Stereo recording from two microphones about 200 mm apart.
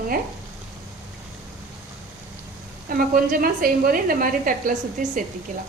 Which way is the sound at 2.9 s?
45° right (ahead or behind).